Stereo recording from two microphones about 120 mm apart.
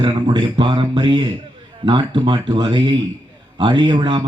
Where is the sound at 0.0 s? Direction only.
40° right (ahead or behind).